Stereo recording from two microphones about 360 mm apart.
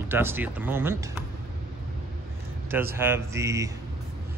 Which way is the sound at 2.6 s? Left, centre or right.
Centre.